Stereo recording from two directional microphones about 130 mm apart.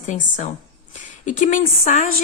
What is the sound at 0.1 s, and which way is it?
A woman's voice, 75° left (ahead or behind).